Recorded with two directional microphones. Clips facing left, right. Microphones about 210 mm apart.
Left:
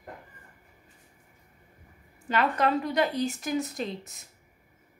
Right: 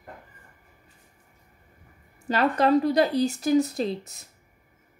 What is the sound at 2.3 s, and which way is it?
Speech, 35° right (ahead or behind).